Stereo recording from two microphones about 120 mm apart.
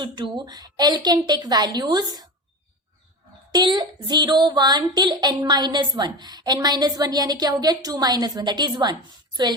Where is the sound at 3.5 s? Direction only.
35° right (ahead or behind).